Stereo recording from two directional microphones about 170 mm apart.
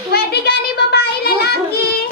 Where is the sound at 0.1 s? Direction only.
75° left (ahead or behind).